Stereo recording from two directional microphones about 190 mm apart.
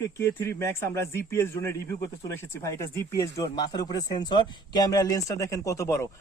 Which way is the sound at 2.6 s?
15° left (ahead or behind).